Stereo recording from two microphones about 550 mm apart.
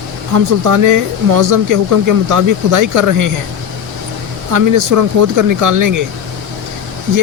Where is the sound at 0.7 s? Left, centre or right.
Right.